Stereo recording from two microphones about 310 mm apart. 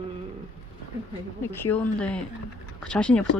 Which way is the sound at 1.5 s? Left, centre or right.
Centre.